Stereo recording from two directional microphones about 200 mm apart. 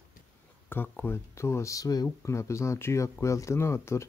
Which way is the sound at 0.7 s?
10° left (ahead or behind).